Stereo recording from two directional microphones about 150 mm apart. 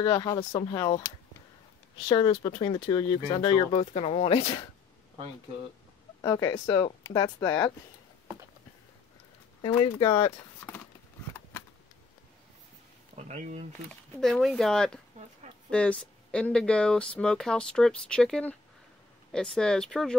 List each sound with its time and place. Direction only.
0.0 s speech: 30° left (ahead or behind)
2.0 s speech: 30° left (ahead or behind)
6.2 s speech: 25° left (ahead or behind)
9.6 s speech: 35° left (ahead or behind)
10.7 s a sound: 15° left (ahead or behind)
13.2 s speech: 50° right (ahead or behind)
13.8 s speech: 5° left (ahead or behind)